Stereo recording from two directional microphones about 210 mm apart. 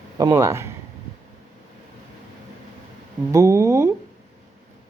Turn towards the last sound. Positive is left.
turn(degrees=-15)  # may be behind; listen again after turning